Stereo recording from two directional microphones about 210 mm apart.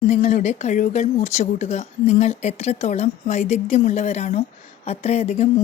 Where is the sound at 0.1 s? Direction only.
35° left (ahead or behind).